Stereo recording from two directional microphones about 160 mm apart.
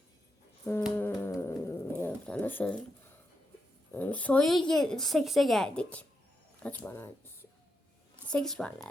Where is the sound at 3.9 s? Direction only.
10° left (ahead or behind).